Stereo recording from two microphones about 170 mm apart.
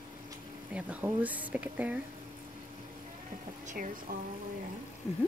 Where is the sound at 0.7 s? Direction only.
10° right (ahead or behind).